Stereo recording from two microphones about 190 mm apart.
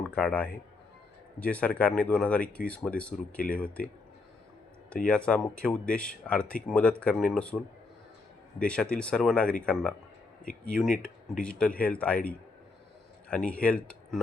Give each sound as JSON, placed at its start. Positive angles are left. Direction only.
{"t": 0.1, "sound": "speech", "side_deg": 5}
{"t": 5.0, "sound": "speech", "side_deg": 5}
{"t": 10.4, "sound": "speech", "side_deg": 45}
{"t": 11.0, "sound": "speech", "side_deg": 5}